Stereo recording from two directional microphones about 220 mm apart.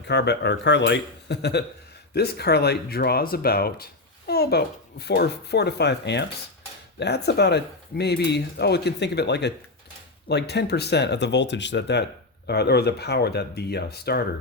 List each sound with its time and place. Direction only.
0.0 s speech: 50° left (ahead or behind)